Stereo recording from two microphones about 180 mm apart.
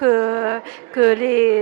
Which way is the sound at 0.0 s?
20° right (ahead or behind).